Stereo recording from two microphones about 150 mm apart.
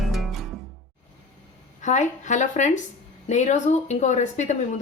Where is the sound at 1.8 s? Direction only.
55° left (ahead or behind).